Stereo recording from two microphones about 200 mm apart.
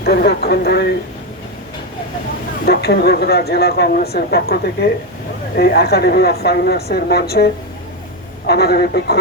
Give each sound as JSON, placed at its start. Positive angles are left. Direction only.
{"t": 0.0, "sound": "speech", "side_deg": 55}
{"t": 2.6, "sound": "speech", "side_deg": 55}